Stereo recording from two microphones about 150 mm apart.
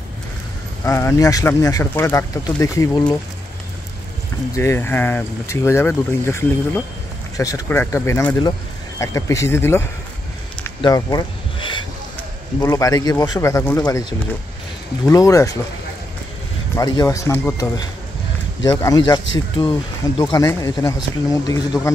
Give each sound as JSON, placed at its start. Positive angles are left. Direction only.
{"t": 0.8, "sound": "speech", "side_deg": 20}
{"t": 4.6, "sound": "speech", "side_deg": 15}
{"t": 10.8, "sound": "a sound", "side_deg": 25}
{"t": 12.5, "sound": "speech", "side_deg": 20}
{"t": 15.0, "sound": "speech", "side_deg": 20}
{"t": 16.7, "sound": "speech", "side_deg": 25}